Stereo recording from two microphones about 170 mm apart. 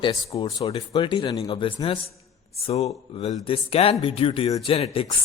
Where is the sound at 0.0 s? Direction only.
30° left (ahead or behind).